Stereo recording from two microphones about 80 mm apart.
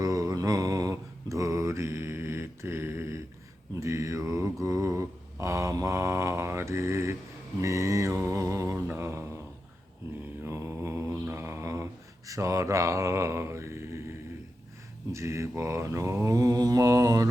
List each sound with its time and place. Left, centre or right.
0.0 s mantra: right
10.4 s mantra: right
15.1 s mantra: right